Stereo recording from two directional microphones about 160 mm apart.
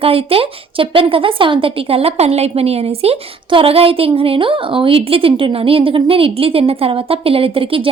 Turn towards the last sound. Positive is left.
turn(degrees=-35)  # may be behind; listen again after turning